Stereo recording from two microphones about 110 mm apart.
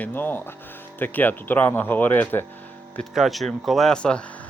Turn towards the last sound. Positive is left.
turn(degrees=10)  # may be behind; listen again after turning